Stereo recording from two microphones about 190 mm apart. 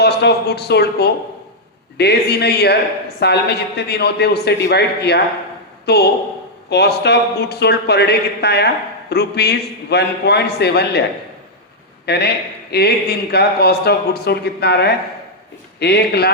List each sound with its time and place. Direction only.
0.0 s a man's voice: 60° left (ahead or behind)
12.0 s a man's voice: 60° left (ahead or behind)